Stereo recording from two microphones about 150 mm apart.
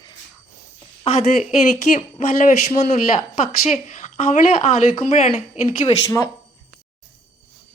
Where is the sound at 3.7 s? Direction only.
50° left (ahead or behind).